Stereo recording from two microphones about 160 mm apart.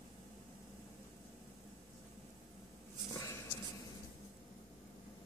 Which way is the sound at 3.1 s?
20° left (ahead or behind).